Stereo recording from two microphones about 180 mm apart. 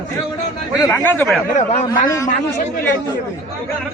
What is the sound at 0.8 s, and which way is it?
Speech, 15° left (ahead or behind).